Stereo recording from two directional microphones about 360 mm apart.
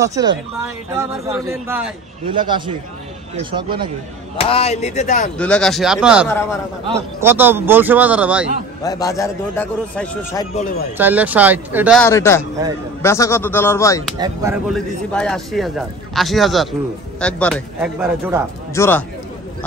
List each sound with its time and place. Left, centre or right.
0.0 s a man's voice: centre
4.4 s speech: centre
5.4 s speech: centre
8.8 s speech: centre
14.1 s speech: centre
18.7 s speech: centre